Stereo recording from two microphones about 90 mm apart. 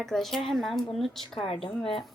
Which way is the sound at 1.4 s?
90° left.